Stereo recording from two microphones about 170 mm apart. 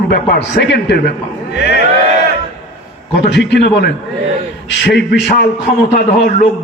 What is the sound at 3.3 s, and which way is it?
Speech, 90° left.